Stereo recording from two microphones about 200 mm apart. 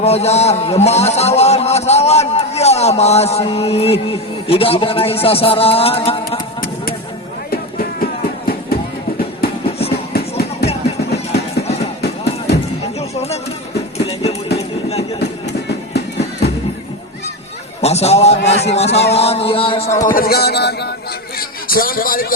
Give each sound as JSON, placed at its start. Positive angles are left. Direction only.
{"t": 0.0, "sound": "a man's voice", "side_deg": 30}
{"t": 7.5, "sound": "music", "side_deg": 45}
{"t": 10.7, "sound": "music", "side_deg": 30}
{"t": 12.0, "sound": "music", "side_deg": 55}
{"t": 13.0, "sound": "chatter", "side_deg": 30}
{"t": 14.0, "sound": "music", "side_deg": 30}
{"t": 15.9, "sound": "music", "side_deg": 55}
{"t": 17.7, "sound": "a man's voice", "side_deg": 30}
{"t": 19.1, "sound": "a sound", "side_deg": 30}
{"t": 20.1, "sound": "a man's voice", "side_deg": 50}
{"t": 21.3, "sound": "a sound", "side_deg": 45}